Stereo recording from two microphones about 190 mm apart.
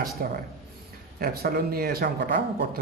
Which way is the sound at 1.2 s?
55° right (ahead or behind).